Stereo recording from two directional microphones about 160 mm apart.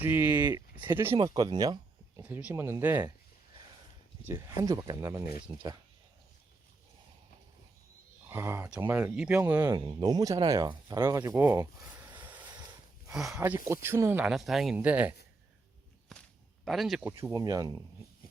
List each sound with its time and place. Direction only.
0.0 s speech: 15° right (ahead or behind)
1.1 s speech: 25° right (ahead or behind)
2.2 s speech: 10° right (ahead or behind)
4.3 s speech: 15° right (ahead or behind)
8.3 s speech: 15° right (ahead or behind)
9.7 s speech: 25° right (ahead or behind)
13.1 s speech: 5° right (ahead or behind)
13.8 s speech: 15° right (ahead or behind)
16.1 s a sound: centre (ahead or behind)
16.6 s speech: centre (ahead or behind)
17.0 s speech: 15° right (ahead or behind)